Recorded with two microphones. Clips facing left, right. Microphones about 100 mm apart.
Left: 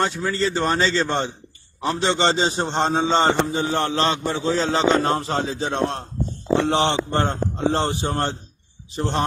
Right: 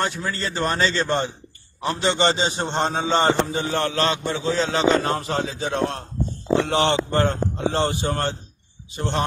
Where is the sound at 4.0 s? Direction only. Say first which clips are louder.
Left 1 dB; 35° left (ahead or behind).